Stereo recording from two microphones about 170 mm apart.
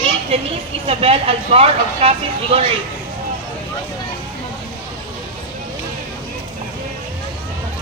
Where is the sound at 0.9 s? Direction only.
35° right (ahead or behind).